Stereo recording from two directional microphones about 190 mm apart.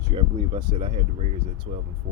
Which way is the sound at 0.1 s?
25° right (ahead or behind).